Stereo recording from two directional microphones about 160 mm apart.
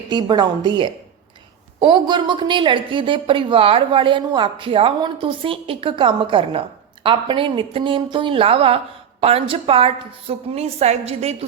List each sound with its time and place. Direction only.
0.1 s a woman's voice: 25° right (ahead or behind)